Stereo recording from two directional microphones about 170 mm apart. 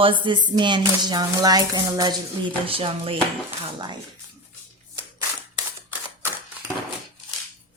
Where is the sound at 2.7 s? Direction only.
35° right (ahead or behind).